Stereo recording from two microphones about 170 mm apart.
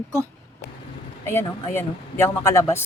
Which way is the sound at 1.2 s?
15° left (ahead or behind).